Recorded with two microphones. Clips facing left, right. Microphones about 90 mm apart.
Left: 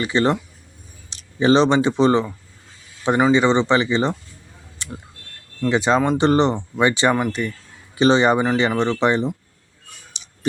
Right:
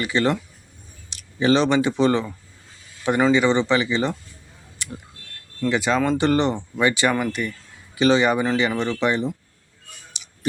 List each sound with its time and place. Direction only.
0.0 s speech: 25° left (ahead or behind)
4.8 s a sound: 25° left (ahead or behind)
5.6 s speech: 30° left (ahead or behind)
10.1 s clicking: 30° left (ahead or behind)